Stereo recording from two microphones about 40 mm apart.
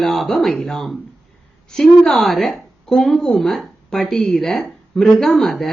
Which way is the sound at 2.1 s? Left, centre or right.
Centre.